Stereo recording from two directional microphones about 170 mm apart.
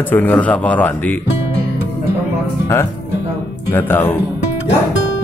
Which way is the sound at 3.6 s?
10° left (ahead or behind).